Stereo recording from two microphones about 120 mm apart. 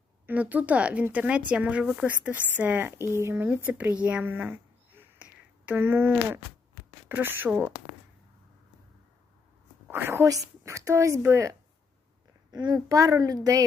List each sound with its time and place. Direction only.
0.3 s speech: 15° right (ahead or behind)
4.9 s a sound: 15° right (ahead or behind)
7.1 s speech: 15° right (ahead or behind)
9.9 s a woman's voice: 20° right (ahead or behind)
12.5 s a woman's voice: 35° right (ahead or behind)